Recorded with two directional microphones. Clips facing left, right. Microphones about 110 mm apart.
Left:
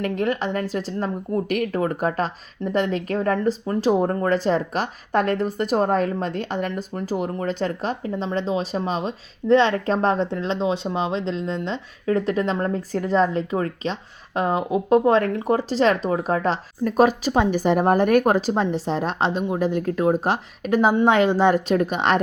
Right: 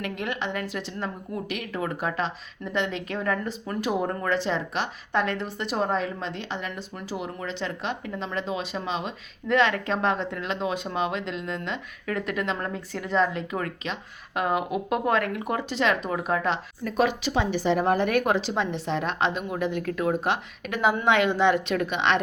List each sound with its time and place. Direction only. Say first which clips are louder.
0.0 s speech: left 7 dB; 40° left (ahead or behind)